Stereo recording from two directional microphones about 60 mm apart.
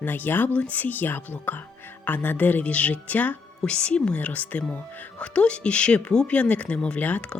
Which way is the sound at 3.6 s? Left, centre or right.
Centre.